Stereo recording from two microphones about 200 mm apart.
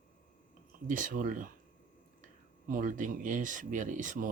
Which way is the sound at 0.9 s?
40° right (ahead or behind).